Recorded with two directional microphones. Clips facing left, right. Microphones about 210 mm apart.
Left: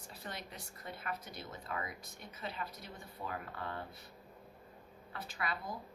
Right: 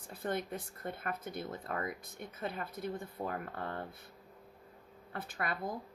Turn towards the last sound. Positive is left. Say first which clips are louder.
# right 3 dB
turn(degrees=-55)  # may be behind; listen again after turning